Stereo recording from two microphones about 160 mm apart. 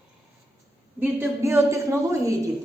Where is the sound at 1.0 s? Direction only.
15° right (ahead or behind).